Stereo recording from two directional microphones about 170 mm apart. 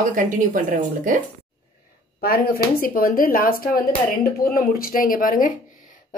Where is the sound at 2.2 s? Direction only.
60° left (ahead or behind).